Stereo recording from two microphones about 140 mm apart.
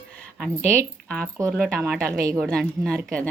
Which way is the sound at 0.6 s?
20° right (ahead or behind).